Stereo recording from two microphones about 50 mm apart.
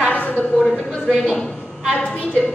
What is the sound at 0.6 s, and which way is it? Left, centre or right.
Speech, centre.